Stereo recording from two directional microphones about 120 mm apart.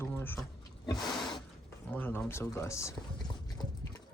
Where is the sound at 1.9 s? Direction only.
15° left (ahead or behind).